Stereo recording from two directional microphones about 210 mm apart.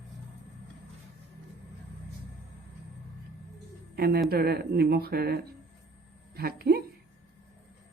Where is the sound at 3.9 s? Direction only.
50° right (ahead or behind).